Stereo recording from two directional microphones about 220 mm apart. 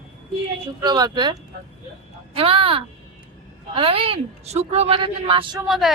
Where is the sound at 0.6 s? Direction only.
20° right (ahead or behind).